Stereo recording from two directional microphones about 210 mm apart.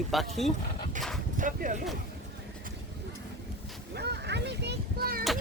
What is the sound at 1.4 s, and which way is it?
Speech, 40° right (ahead or behind).